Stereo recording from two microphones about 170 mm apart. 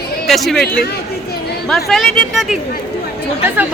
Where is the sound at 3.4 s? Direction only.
10° right (ahead or behind).